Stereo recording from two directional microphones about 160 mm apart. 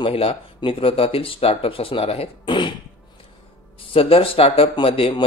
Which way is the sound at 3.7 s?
35° left (ahead or behind).